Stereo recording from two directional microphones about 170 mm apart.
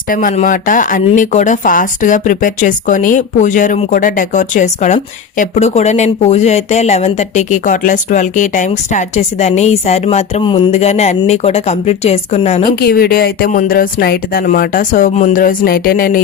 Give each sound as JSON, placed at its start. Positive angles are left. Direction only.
{"t": 0.1, "sound": "speech", "side_deg": 50}
{"t": 12.8, "sound": "speech", "side_deg": 60}